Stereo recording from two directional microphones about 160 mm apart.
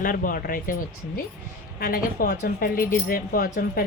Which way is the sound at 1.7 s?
70° left (ahead or behind).